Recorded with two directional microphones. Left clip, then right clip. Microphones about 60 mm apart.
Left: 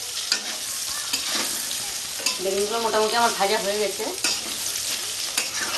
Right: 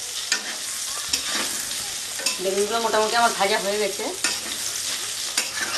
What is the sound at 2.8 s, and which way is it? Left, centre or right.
Stir, centre.